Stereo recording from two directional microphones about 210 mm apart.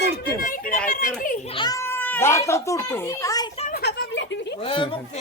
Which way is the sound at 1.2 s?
25° left (ahead or behind).